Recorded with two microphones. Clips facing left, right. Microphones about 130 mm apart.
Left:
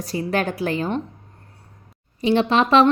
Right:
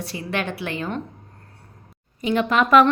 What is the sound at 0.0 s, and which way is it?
Speech, 40° left (ahead or behind).